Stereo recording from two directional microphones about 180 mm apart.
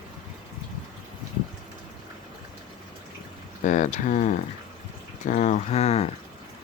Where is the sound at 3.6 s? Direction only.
45° left (ahead or behind).